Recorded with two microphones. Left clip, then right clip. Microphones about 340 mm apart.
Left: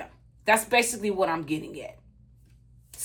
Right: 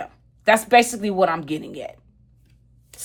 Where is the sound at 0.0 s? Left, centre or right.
Right.